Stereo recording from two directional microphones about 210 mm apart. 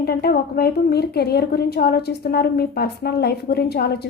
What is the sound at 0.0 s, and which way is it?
A woman's voice, 50° left (ahead or behind).